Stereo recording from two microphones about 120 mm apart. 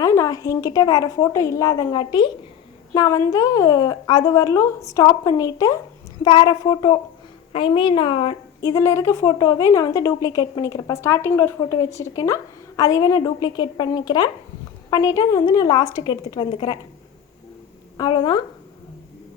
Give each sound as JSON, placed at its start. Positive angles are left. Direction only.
{"t": 0.0, "sound": "a woman's voice", "side_deg": 25}
{"t": 6.2, "sound": "a woman's voice", "side_deg": 35}
{"t": 8.6, "sound": "a woman's voice", "side_deg": 25}
{"t": 11.0, "sound": "a woman's voice", "side_deg": 20}
{"t": 17.9, "sound": "a woman's voice", "side_deg": 35}